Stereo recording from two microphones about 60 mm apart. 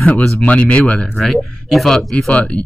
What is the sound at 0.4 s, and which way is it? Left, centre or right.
Speech, centre.